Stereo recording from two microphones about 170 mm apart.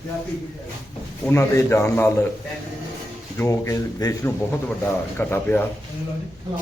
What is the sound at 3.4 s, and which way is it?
A man's voice, 15° left (ahead or behind).